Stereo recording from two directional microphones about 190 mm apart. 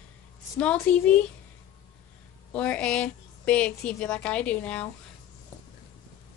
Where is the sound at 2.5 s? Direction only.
5° left (ahead or behind).